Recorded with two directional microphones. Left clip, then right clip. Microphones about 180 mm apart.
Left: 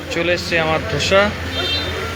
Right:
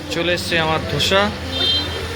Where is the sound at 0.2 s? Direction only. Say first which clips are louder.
Left 1 dB; 20° right (ahead or behind).